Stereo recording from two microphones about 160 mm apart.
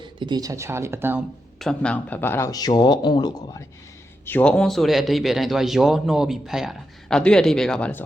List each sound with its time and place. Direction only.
0.0 s speech: 30° right (ahead or behind)
1.5 s speech: 5° left (ahead or behind); by 3.6 s 25° left (ahead or behind)
4.3 s speech: 10° left (ahead or behind)